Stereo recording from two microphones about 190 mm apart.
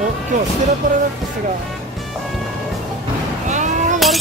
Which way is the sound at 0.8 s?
45° right (ahead or behind).